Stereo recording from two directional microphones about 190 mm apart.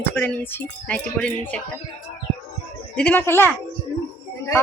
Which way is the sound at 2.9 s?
10° left (ahead or behind).